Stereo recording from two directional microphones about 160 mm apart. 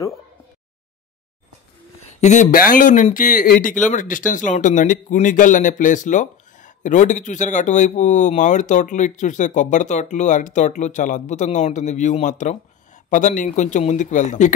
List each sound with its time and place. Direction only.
2.1 s a man's voice: 50° left (ahead or behind)